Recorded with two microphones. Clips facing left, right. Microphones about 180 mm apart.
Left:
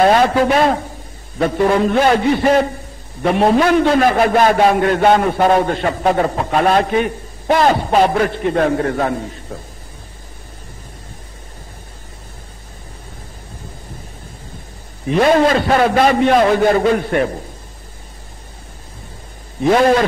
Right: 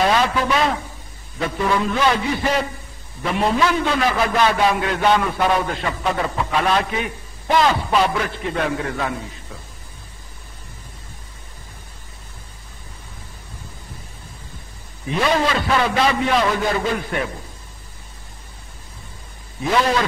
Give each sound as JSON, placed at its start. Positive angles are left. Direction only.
{"t": 0.0, "sound": "a man's voice", "side_deg": 50}
{"t": 15.1, "sound": "a man's voice", "side_deg": 50}
{"t": 19.7, "sound": "a man's voice", "side_deg": 50}